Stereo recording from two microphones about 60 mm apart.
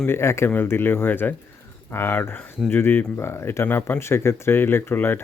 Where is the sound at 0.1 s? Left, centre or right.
Left.